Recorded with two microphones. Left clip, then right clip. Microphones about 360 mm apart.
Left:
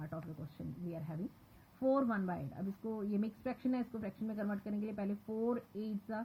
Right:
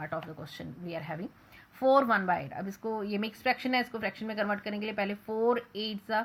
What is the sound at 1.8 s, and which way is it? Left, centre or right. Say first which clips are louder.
Speech: right 10 dB; centre.